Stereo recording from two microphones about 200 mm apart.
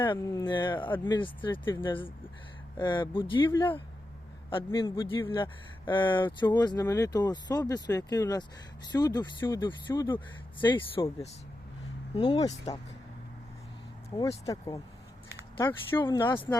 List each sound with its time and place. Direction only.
0.1 s speech: 20° left (ahead or behind)
0.9 s speech: 10° left (ahead or behind)
1.1 s speech: 25° left (ahead or behind)
14.1 s speech: 20° left (ahead or behind)